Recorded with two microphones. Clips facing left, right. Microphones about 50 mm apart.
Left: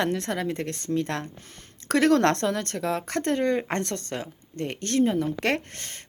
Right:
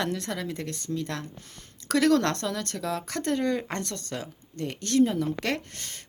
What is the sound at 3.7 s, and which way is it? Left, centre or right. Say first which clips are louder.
A woman's voice: left 4 dB; left.